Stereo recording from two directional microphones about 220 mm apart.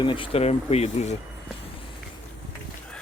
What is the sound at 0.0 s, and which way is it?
Speech, 20° left (ahead or behind).